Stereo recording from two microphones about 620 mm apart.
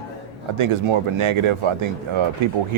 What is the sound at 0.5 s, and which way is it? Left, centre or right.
Speech, right.